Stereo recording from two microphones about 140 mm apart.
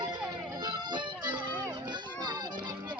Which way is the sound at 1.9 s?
35° right (ahead or behind).